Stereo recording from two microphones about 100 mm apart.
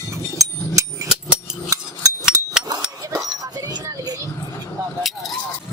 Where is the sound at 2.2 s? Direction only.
5° right (ahead or behind).